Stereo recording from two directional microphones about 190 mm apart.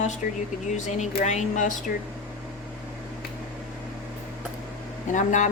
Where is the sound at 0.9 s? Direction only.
40° left (ahead or behind).